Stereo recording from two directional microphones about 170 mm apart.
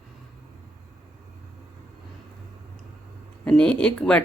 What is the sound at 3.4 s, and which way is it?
Speech, 5° left (ahead or behind).